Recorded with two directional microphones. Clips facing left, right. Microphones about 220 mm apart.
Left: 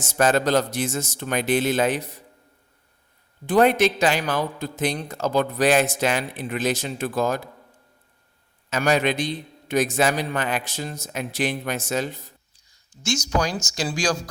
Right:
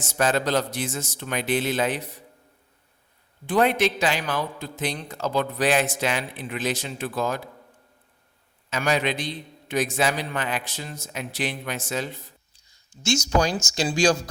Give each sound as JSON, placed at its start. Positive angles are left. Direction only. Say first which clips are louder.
{"t": 0.0, "sound": "a man's voice", "louder": "left 3 dB", "side_deg": 45}
{"t": 3.4, "sound": "a man's voice", "louder": "left 3 dB", "side_deg": 45}
{"t": 8.7, "sound": "a man's voice", "louder": "left 3 dB", "side_deg": 45}
{"t": 12.9, "sound": "speech", "louder": "right 2 dB", "side_deg": -25}